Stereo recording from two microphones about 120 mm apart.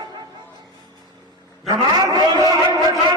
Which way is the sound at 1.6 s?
30° right (ahead or behind).